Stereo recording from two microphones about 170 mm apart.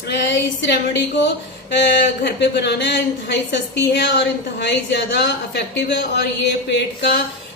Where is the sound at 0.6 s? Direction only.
90° left.